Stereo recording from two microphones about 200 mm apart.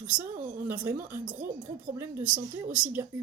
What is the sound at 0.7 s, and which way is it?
Speech, 10° right (ahead or behind).